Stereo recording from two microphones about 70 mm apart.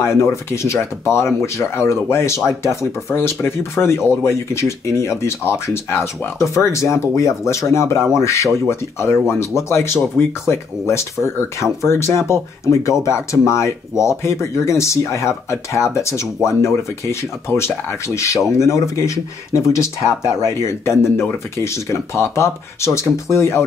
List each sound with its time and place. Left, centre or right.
0.0 s speech: left